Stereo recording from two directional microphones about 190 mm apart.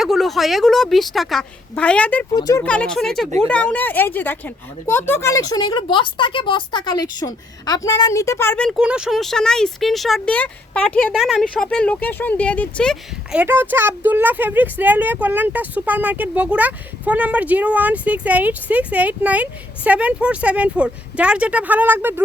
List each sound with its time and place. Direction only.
0.0 s speech: centre (ahead or behind)
2.3 s speech: 20° left (ahead or behind)
2.6 s speech: 5° left (ahead or behind)
8.8 s speech: 5° right (ahead or behind)
13.3 s speech: 10° right (ahead or behind)